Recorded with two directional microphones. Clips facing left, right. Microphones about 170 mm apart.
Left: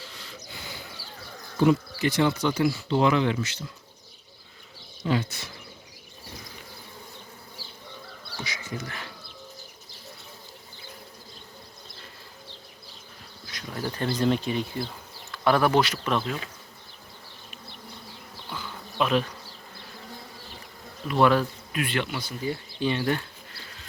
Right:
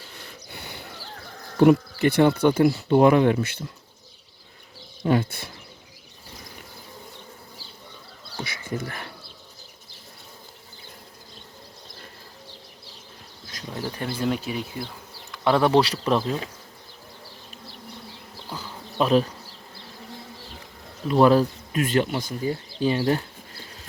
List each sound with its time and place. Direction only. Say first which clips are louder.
0.0 s a sound: even; 55° right (ahead or behind)
1.5 s speech: right 5 dB; 60° right (ahead or behind)
5.0 s speech: right 5 dB; 50° right (ahead or behind)
8.4 s speech: right 5 dB; 55° right (ahead or behind)
13.7 s speech: left 2 dB; 15° right (ahead or behind)
15.3 s speech: right 2 dB; 20° right (ahead or behind)
18.4 s bee: right 1 dB; 40° right (ahead or behind)
21.1 s speech: right 4 dB; 35° right (ahead or behind)